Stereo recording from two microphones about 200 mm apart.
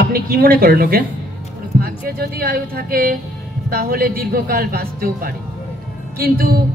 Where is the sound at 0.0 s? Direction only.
50° right (ahead or behind).